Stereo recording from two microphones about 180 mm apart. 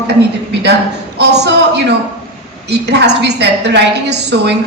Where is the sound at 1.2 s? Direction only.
70° right (ahead or behind).